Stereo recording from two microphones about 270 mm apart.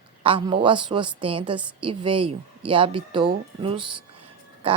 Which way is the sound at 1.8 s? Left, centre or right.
Centre.